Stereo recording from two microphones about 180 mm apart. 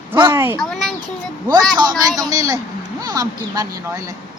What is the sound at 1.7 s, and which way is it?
Speech, 20° right (ahead or behind).